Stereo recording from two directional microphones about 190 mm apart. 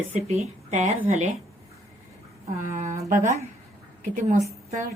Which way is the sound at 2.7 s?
40° right (ahead or behind).